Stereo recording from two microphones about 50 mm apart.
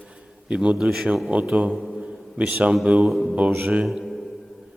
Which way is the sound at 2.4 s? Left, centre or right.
Right.